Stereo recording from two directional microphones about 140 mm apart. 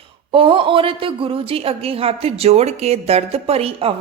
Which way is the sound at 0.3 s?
40° right (ahead or behind).